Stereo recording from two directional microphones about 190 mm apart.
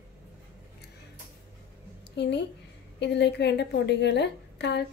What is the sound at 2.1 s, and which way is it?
A woman's voice, 65° left (ahead or behind).